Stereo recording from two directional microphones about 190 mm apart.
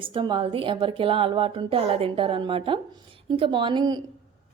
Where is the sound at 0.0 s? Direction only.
25° right (ahead or behind).